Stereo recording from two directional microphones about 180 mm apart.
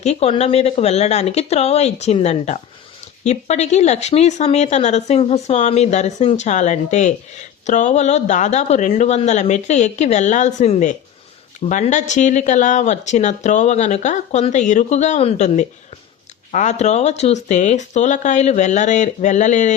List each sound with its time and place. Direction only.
0.0 s speech: 35° left (ahead or behind)